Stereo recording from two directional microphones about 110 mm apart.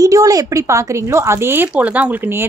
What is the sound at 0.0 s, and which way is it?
A woman's voice, 30° right (ahead or behind).